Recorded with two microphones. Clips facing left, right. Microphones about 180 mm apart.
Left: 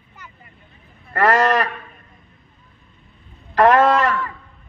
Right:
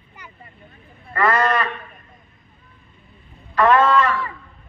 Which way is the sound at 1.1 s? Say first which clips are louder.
Left 3 dB; 85° left.